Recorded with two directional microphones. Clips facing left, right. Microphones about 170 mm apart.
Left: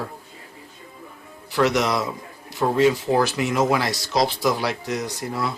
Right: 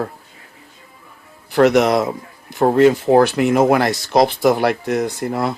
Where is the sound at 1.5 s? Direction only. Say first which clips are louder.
Right 7 dB; 55° right (ahead or behind).